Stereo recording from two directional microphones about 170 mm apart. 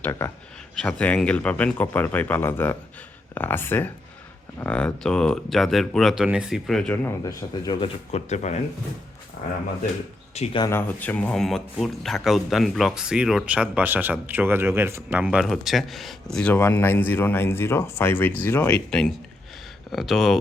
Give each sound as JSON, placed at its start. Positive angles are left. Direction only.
{"t": 0.0, "sound": "speech", "side_deg": 10}
{"t": 8.1, "sound": "speech", "side_deg": 40}
{"t": 10.3, "sound": "speech", "side_deg": 40}
{"t": 10.7, "sound": "speech", "side_deg": 15}